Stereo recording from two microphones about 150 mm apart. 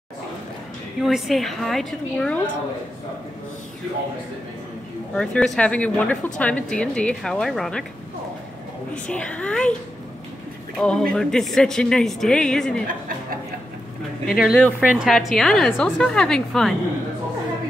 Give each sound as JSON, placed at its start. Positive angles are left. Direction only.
{"t": 1.0, "sound": "speech", "side_deg": 0}
{"t": 5.1, "sound": "a woman's voice", "side_deg": 5}
{"t": 8.9, "sound": "a woman's voice", "side_deg": 10}
{"t": 10.8, "sound": "speech", "side_deg": 5}
{"t": 14.2, "sound": "speech", "side_deg": 0}